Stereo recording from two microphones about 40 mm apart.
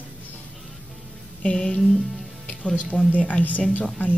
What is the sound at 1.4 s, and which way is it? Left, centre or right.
Speech, left.